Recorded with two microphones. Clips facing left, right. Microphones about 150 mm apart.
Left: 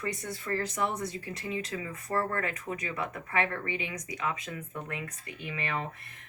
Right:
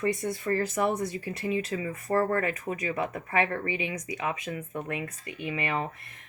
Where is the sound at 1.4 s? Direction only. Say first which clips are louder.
Right 6 dB; 25° right (ahead or behind).